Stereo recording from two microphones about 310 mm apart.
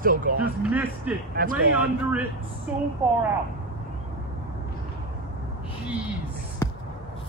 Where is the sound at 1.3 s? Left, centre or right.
Right.